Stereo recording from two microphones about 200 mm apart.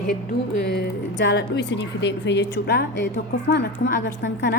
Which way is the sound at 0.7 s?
60° left (ahead or behind).